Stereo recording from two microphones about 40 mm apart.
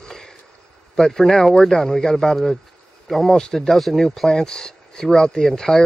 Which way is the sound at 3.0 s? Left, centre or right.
Centre.